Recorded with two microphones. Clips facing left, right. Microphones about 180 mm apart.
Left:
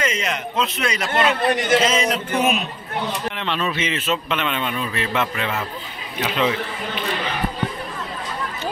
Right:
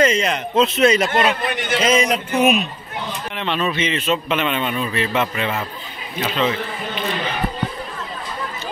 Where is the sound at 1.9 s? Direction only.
15° right (ahead or behind).